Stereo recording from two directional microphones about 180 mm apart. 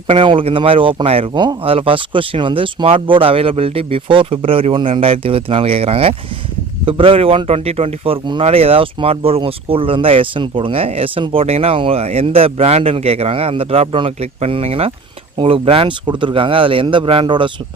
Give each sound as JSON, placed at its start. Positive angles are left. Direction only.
{"t": 0.1, "sound": "speech", "side_deg": -30}